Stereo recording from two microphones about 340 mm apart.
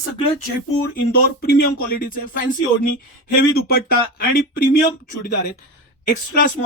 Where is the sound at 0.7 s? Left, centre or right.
Left.